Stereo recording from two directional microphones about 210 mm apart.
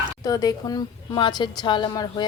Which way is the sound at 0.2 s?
20° left (ahead or behind).